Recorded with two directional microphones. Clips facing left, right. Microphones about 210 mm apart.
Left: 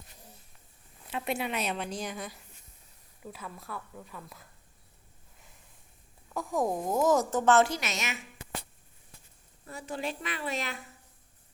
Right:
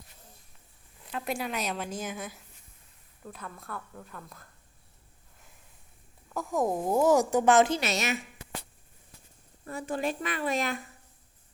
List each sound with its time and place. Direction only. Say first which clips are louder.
1.1 s a woman's voice: even; centre (ahead or behind)
6.2 s a woman's voice: right 1 dB; centre (ahead or behind); by 7.8 s 15° right (ahead or behind)
7.8 s a woman's voice: right 6 dB; 35° right (ahead or behind)
9.6 s a woman's voice: right 5 dB; 55° right (ahead or behind)